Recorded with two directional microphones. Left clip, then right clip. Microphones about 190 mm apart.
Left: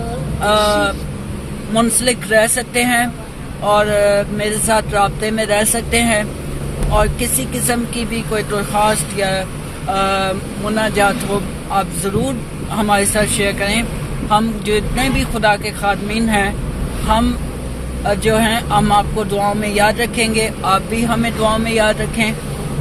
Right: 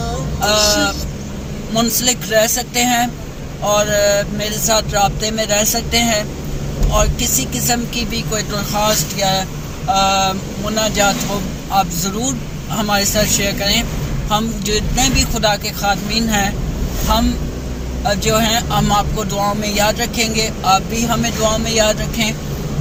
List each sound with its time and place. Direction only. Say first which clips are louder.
0.4 s speech: left 1 dB; 20° left (ahead or behind)
12.7 s speech: left 1 dB; 20° left (ahead or behind)
18.0 s speech: left 1 dB; 20° left (ahead or behind)